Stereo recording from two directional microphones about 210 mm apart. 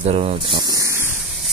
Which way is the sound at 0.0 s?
30° right (ahead or behind).